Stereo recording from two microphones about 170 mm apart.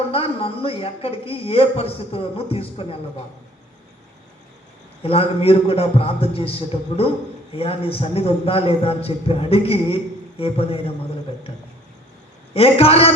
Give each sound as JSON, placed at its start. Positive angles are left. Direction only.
{"t": 0.1, "sound": "a man's voice", "side_deg": 35}
{"t": 5.0, "sound": "a man's voice", "side_deg": 35}
{"t": 12.5, "sound": "a man's voice", "side_deg": 35}